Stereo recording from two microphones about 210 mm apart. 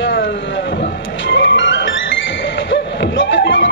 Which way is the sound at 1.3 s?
60° left (ahead or behind).